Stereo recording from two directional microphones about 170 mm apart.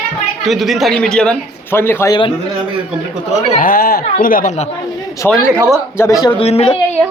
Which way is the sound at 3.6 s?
60° left (ahead or behind).